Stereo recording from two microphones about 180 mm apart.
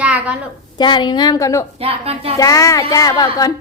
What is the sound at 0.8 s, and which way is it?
Speech, 25° left (ahead or behind).